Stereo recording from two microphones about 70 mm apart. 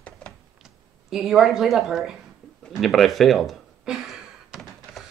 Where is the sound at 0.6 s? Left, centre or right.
Centre.